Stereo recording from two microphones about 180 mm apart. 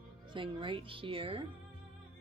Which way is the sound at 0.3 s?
30° right (ahead or behind).